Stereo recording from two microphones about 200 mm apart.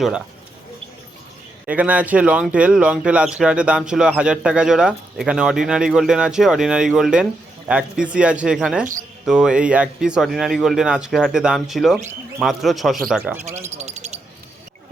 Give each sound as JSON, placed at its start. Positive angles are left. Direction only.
{"t": 1.6, "sound": "speech", "side_deg": -5}
{"t": 13.4, "sound": "speech", "side_deg": -35}
{"t": 13.7, "sound": "bird", "side_deg": -35}